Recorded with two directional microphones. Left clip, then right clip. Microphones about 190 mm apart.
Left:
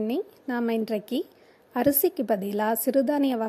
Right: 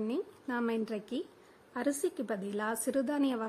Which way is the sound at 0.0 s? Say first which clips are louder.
Left 7 dB; 25° left (ahead or behind).